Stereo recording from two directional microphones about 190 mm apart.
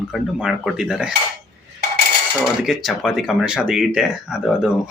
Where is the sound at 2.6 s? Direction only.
Centre (ahead or behind).